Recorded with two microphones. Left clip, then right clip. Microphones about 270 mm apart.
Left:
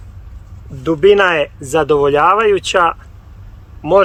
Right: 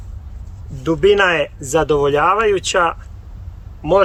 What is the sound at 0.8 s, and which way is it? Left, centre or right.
Speech, centre.